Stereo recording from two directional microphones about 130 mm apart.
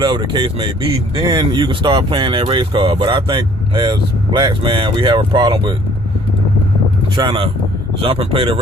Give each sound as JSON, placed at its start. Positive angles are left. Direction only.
{"t": 0.0, "sound": "speech", "side_deg": -35}
{"t": 7.2, "sound": "speech", "side_deg": -40}